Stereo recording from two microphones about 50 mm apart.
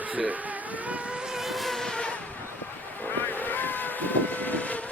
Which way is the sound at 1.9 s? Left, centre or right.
Left.